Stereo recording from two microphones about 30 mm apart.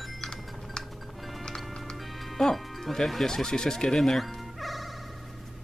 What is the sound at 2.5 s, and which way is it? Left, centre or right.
Speech, centre.